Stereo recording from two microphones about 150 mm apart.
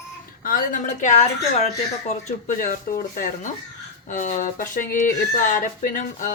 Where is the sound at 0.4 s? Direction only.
65° left (ahead or behind).